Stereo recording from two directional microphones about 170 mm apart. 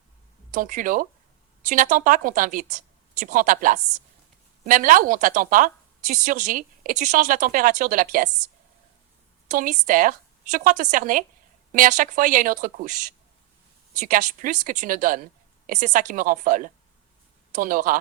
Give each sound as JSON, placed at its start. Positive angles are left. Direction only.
{"t": 0.5, "sound": "a woman's voice", "side_deg": -50}
{"t": 9.5, "sound": "a woman's voice", "side_deg": -50}